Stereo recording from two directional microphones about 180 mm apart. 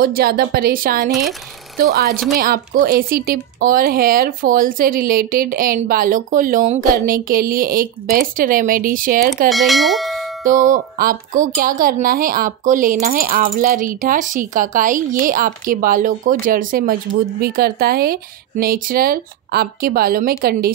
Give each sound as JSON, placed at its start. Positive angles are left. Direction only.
{"t": 0.0, "sound": "speech", "side_deg": -55}
{"t": 9.5, "sound": "bell", "side_deg": 0}
{"t": 10.4, "sound": "speech", "side_deg": -45}